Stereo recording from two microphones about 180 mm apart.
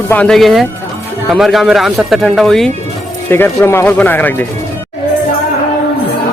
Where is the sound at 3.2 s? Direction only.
10° left (ahead or behind).